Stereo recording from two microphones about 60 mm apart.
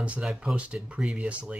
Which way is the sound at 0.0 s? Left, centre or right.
Right.